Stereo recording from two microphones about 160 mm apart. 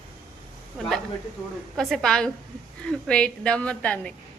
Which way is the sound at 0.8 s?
Centre (ahead or behind).